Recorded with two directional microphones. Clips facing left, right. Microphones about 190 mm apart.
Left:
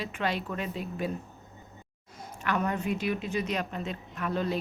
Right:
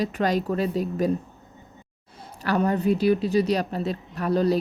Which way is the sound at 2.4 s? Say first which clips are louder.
Right 7 dB; 35° right (ahead or behind).